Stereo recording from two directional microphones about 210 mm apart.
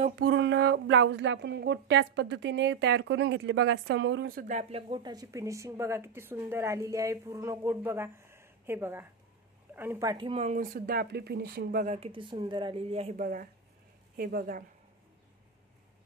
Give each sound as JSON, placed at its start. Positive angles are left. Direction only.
{"t": 0.3, "sound": "speech", "side_deg": -60}